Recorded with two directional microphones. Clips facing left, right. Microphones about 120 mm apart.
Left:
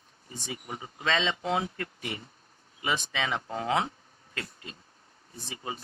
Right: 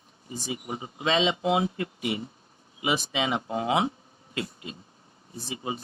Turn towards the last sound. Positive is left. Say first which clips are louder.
# right 5 dB
turn(degrees=-15)  # may be behind; listen again after turning